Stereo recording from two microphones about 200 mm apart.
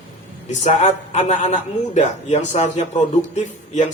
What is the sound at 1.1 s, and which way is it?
Speech, 35° left (ahead or behind).